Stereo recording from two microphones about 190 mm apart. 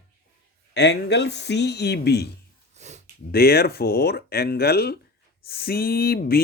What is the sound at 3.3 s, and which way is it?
Speech, 55° left (ahead or behind).